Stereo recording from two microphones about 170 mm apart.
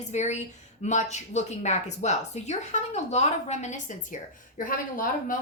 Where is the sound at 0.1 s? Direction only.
45° left (ahead or behind).